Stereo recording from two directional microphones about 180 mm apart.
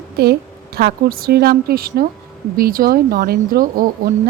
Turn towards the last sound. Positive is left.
turn(degrees=-55)  # may be behind; listen again after turning